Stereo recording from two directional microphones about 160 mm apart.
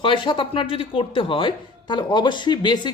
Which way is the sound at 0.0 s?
30° left (ahead or behind).